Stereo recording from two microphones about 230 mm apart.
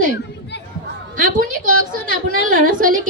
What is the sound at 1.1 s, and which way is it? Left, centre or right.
A woman's voice, right.